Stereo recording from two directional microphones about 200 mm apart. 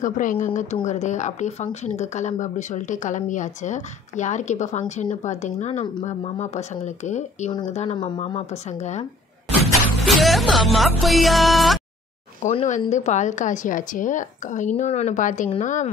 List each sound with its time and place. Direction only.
0.0 s speech: 40° left (ahead or behind)
10.0 s music: centre (ahead or behind)
12.4 s speech: 35° left (ahead or behind)